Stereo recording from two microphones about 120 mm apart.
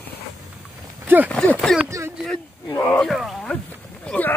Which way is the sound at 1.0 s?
15° right (ahead or behind).